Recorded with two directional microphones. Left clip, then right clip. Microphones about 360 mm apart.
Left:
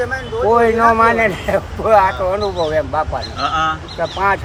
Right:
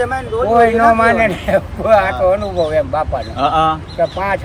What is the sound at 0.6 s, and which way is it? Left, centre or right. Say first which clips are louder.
A man's voice: right 2 dB; centre.